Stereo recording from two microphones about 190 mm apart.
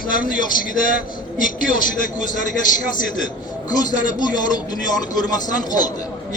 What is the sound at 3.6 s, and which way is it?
Speech, 20° left (ahead or behind).